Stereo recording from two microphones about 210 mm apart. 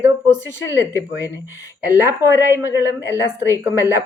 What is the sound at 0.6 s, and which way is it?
Speech, 60° left (ahead or behind).